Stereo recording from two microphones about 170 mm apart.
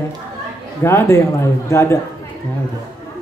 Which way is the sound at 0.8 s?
15° left (ahead or behind).